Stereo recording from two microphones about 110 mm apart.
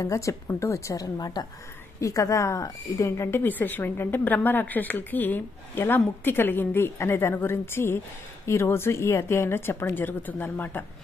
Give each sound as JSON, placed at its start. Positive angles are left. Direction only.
{"t": 0.0, "sound": "a woman's voice", "side_deg": 30}